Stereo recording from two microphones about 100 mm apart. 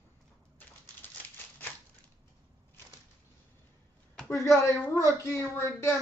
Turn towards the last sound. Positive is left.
turn(degrees=30)  # may be behind; listen again after turning